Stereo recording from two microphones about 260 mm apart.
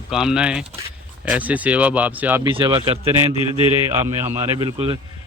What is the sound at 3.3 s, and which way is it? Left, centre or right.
Speech, centre.